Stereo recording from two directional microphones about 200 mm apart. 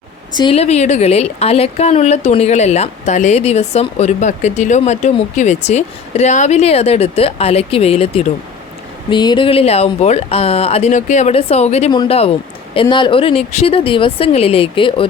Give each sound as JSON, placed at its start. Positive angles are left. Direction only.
{"t": 0.3, "sound": "speech", "side_deg": 30}